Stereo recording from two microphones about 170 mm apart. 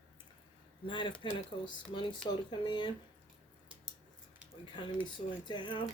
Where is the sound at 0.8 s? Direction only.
30° left (ahead or behind).